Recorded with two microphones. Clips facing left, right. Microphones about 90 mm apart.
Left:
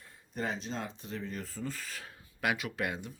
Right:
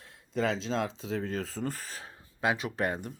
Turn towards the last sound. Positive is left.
turn(degrees=-40)  # may be behind; listen again after turning